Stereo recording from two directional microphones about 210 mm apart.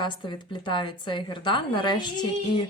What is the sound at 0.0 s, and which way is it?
A woman's voice, 20° left (ahead or behind).